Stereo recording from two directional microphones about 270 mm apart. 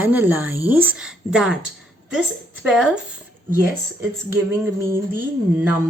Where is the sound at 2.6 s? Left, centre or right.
Centre.